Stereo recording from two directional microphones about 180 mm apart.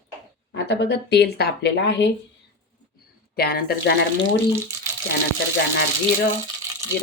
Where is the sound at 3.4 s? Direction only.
60° left (ahead or behind).